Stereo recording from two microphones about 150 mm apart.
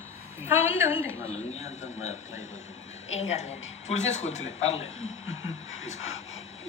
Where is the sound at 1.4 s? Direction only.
45° left (ahead or behind).